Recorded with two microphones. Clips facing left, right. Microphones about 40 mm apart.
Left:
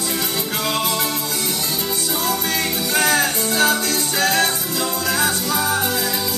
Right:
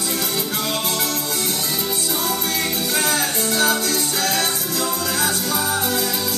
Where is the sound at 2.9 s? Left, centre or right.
Left.